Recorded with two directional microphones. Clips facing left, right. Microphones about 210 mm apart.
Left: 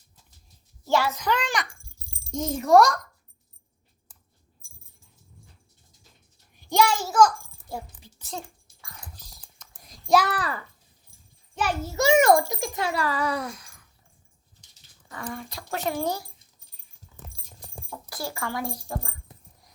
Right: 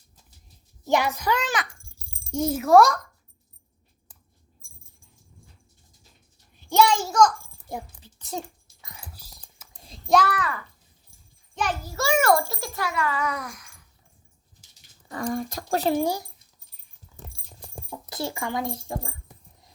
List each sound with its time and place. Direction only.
0.9 s a child's voice: 15° right (ahead or behind); by 3.0 s centre (ahead or behind)
6.6 s a sound: 10° left (ahead or behind)
7.7 s a woman's voice: 20° right (ahead or behind)
8.0 s a sound: 15° left (ahead or behind)
9.0 s whispering: 5° right (ahead or behind)
9.7 s child singing: 25° right (ahead or behind)
10.3 s speech: 35° left (ahead or behind)
11.8 s a child's voice: 20° left (ahead or behind)
12.9 s speech: 35° left (ahead or behind)
15.1 s speech: 40° right (ahead or behind)
16.0 s a child's voice: 15° right (ahead or behind)
17.9 s speech: 20° right (ahead or behind)